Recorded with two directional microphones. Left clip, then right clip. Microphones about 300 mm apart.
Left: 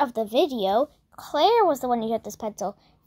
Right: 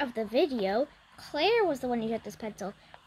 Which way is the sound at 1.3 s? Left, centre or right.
Centre.